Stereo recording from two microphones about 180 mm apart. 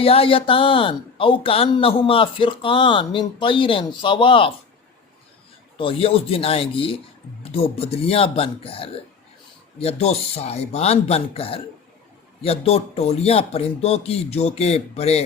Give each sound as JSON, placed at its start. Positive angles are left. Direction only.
{"t": 0.0, "sound": "speech", "side_deg": 30}
{"t": 5.7, "sound": "a man's voice", "side_deg": 30}